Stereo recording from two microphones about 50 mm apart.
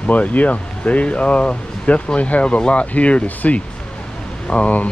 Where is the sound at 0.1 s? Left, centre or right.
Left.